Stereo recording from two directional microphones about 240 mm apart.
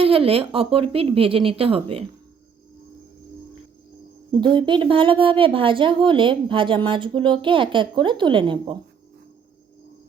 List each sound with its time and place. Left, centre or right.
0.0 s a woman's voice: right
4.3 s a woman's voice: centre